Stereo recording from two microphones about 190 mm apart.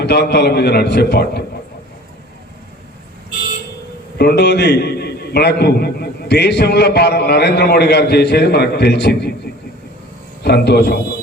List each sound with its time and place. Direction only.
0.0 s a man's voice: 60° left (ahead or behind)
4.2 s a man's voice: 60° left (ahead or behind)
10.4 s a man's voice: 60° left (ahead or behind)